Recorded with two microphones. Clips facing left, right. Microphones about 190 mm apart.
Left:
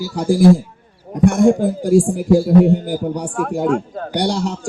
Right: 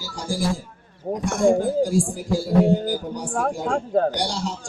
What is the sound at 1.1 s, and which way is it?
Speech, 40° right (ahead or behind).